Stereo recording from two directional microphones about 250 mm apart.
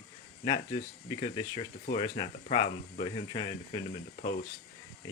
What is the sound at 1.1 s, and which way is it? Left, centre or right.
Speech, centre.